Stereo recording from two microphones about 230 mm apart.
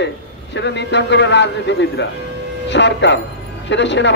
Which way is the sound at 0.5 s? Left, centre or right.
Left.